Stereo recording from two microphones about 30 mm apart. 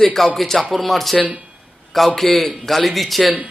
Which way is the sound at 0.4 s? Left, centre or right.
Centre.